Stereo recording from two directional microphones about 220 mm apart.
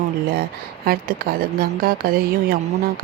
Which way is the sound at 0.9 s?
40° right (ahead or behind).